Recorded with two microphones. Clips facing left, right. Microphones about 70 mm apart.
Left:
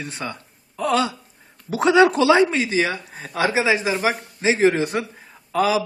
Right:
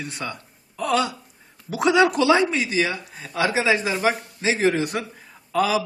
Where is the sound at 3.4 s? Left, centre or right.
Left.